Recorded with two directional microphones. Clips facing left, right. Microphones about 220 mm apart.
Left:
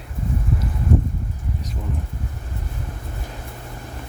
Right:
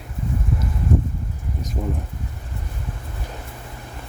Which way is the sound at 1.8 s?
40° right (ahead or behind).